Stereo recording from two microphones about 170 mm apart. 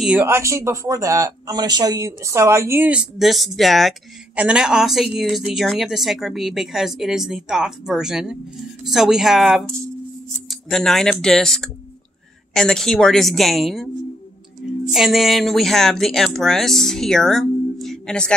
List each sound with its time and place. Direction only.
0.0 s speech: 5° right (ahead or behind)
0.3 s speech: 15° right (ahead or behind); by 13.8 s centre (ahead or behind)
14.9 s speech: centre (ahead or behind)